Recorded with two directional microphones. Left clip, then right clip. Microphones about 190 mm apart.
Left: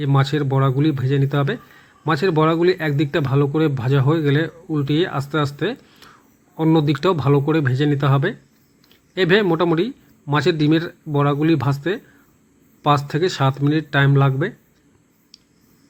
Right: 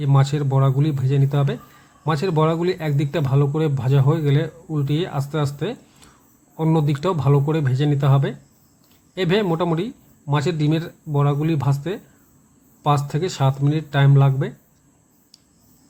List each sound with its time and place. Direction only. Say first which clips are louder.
0.0 s a man's voice: left 3 dB; 5° left (ahead or behind)